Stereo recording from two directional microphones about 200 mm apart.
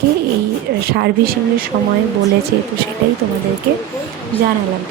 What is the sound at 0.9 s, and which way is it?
Speech, 55° right (ahead or behind).